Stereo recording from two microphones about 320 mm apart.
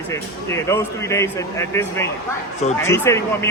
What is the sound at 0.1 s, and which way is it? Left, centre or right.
Speech, centre.